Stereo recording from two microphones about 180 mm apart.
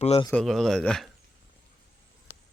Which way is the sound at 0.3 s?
5° left (ahead or behind).